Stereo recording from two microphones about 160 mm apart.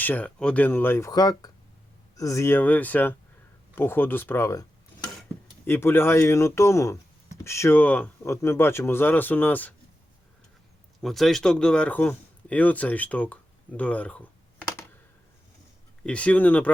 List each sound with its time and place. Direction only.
0.0 s speech: 10° left (ahead or behind)
5.6 s speech: 15° left (ahead or behind)
11.0 s speech: centre (ahead or behind)
16.0 s speech: 10° left (ahead or behind)